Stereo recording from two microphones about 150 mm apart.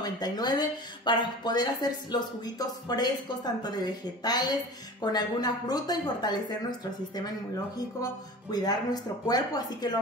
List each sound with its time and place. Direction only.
0.0 s speech: 25° left (ahead or behind)